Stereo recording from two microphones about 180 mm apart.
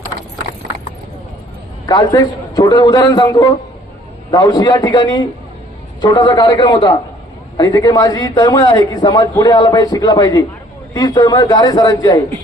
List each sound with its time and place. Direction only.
1.9 s a man's voice: 20° left (ahead or behind)